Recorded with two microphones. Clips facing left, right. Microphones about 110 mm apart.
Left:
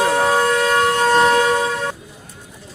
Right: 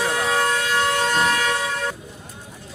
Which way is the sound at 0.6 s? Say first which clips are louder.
Left 5 dB; 40° left (ahead or behind).